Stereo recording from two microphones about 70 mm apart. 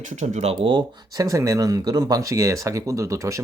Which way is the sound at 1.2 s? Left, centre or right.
Right.